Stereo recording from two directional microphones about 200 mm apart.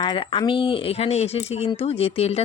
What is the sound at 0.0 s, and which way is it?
Speech, 25° left (ahead or behind).